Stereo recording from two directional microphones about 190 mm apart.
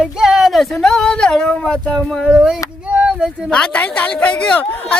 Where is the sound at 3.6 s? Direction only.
5° left (ahead or behind).